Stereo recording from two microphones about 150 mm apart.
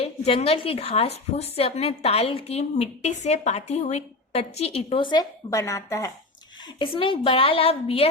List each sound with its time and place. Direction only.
0.0 s a woman's voice: 40° left (ahead or behind); by 6.1 s 20° left (ahead or behind)
6.7 s a woman's voice: 35° left (ahead or behind)